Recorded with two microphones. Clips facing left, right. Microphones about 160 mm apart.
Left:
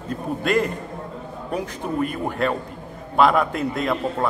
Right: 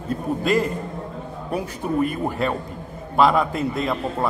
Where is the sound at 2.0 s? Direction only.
5° right (ahead or behind).